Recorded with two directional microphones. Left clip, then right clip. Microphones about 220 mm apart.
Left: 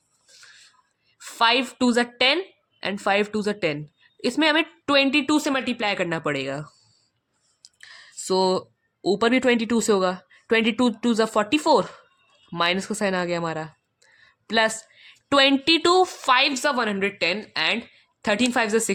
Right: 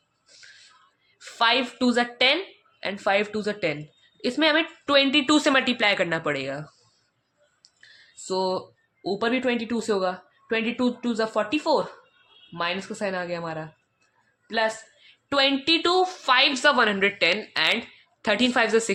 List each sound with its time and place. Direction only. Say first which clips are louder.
0.4 s music: even; 35° left (ahead or behind)
1.2 s a woman's voice: left 2 dB; 35° left (ahead or behind)